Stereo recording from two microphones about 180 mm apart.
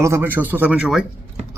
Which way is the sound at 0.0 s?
10° right (ahead or behind).